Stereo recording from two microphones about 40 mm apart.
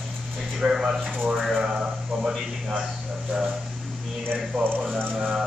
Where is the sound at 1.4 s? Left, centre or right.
Centre.